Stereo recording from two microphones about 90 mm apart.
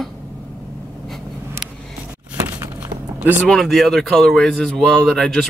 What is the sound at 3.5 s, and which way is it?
A man's voice, 5° left (ahead or behind).